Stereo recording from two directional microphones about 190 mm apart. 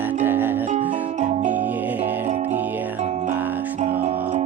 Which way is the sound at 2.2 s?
40° right (ahead or behind).